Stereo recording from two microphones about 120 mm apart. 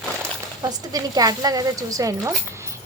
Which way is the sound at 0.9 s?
30° right (ahead or behind).